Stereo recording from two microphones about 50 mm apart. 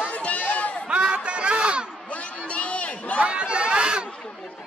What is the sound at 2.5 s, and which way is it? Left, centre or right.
Crowd, left.